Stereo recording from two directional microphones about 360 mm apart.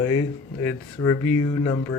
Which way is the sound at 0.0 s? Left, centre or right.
Left.